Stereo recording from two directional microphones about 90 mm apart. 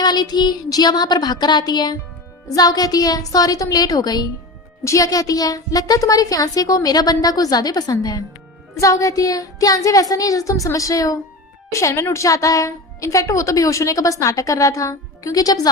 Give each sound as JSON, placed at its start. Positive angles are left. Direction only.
{"t": 0.0, "sound": "speech", "side_deg": 50}
{"t": 4.8, "sound": "a woman's voice", "side_deg": 35}